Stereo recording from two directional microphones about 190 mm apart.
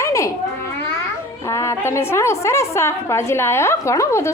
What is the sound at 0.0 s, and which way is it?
Cat, 15° left (ahead or behind).